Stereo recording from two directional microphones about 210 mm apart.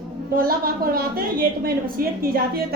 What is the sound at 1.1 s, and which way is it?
Speech, 45° right (ahead or behind).